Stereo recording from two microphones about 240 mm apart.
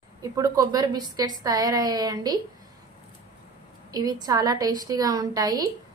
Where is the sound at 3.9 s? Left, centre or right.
Centre.